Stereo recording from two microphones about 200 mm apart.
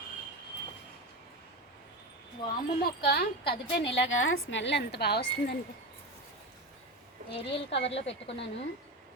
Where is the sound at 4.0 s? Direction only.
75° left (ahead or behind); by 5.5 s 55° left (ahead or behind).